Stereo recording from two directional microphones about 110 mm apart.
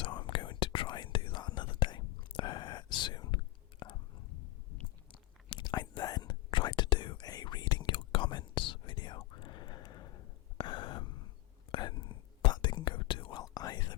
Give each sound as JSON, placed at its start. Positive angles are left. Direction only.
{"t": 0.0, "sound": "whispering", "side_deg": 45}
{"t": 5.5, "sound": "whispering", "side_deg": 40}
{"t": 10.6, "sound": "gasp", "side_deg": 45}
{"t": 11.7, "sound": "whispering", "side_deg": 45}
{"t": 13.4, "sound": "whispering", "side_deg": 35}